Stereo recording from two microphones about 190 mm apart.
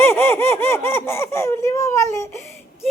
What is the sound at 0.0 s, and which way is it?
Laughter, 10° left (ahead or behind).